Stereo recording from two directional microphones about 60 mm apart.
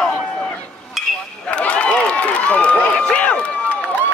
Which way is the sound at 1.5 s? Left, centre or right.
Centre.